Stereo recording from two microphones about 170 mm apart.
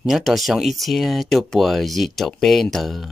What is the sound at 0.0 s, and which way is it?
Speech, centre (ahead or behind).